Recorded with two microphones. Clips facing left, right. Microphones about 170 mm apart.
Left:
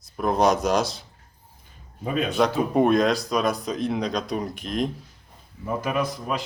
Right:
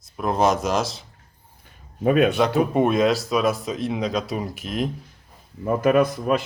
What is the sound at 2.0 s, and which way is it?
Speech, 65° right (ahead or behind).